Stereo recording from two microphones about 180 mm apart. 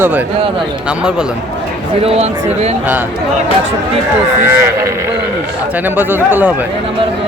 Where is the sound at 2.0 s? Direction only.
35° right (ahead or behind).